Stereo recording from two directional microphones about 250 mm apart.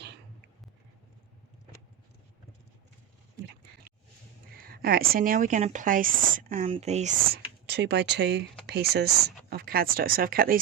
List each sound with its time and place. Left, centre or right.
4.5 s speech: right
7.7 s speech: right